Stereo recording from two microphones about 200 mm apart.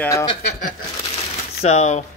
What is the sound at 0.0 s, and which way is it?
Speech, 15° left (ahead or behind).